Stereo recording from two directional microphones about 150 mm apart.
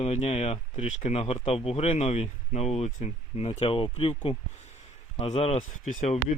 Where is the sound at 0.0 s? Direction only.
45° left (ahead or behind).